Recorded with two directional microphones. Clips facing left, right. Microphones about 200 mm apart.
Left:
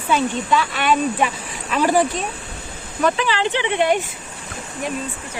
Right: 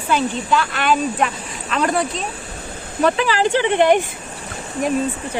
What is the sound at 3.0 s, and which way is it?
Speech, 35° right (ahead or behind).